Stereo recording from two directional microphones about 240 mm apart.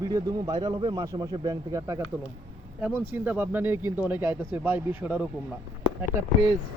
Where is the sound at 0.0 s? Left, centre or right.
Centre.